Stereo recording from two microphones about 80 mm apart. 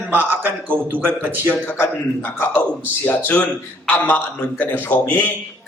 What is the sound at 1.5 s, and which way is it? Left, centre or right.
Speech, left.